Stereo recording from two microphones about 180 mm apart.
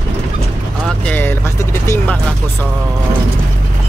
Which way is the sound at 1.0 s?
10° left (ahead or behind).